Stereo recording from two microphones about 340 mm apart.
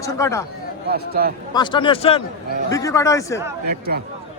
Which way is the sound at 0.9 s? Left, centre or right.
Right.